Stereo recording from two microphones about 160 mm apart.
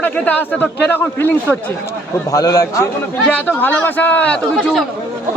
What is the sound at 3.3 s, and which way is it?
A man's voice, 10° left (ahead or behind).